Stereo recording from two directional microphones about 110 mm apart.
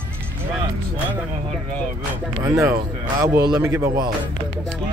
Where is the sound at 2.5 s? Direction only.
25° right (ahead or behind).